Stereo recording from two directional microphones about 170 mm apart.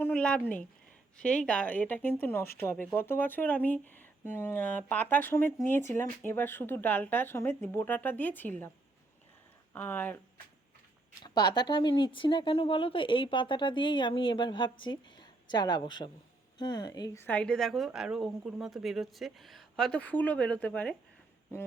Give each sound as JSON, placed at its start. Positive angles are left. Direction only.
{"t": 0.0, "sound": "speech", "side_deg": 5}
{"t": 9.7, "sound": "speech", "side_deg": 10}
{"t": 11.2, "sound": "a woman's voice", "side_deg": 25}